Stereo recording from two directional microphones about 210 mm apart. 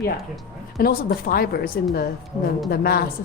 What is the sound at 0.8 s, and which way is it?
A woman's voice, 45° left (ahead or behind).